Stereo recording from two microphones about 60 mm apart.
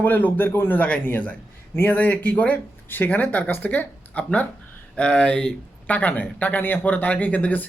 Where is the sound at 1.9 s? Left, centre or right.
Left.